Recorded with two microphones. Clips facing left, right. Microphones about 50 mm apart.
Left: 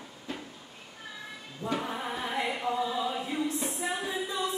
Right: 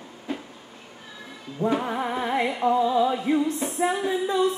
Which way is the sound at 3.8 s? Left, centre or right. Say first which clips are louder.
Right 11 dB; right.